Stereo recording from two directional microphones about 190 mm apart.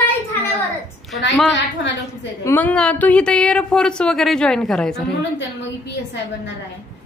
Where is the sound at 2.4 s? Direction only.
10° left (ahead or behind).